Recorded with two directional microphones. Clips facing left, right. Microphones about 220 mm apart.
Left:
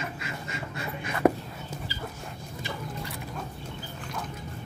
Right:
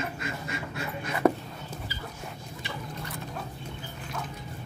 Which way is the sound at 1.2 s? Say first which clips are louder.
Left 1 dB; 10° left (ahead or behind).